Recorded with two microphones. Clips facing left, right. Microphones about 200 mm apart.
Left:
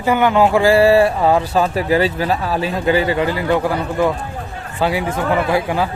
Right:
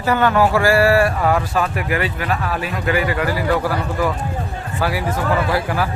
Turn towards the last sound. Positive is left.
turn(degrees=20)  # may be behind; listen again after turning